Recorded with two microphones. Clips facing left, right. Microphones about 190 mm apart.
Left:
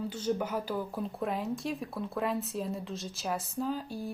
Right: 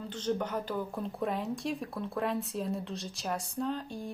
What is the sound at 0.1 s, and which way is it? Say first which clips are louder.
Speech: right 4 dB; 10° left (ahead or behind).